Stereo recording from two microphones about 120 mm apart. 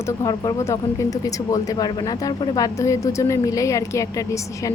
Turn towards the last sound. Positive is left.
turn(degrees=25)  # may be behind; listen again after turning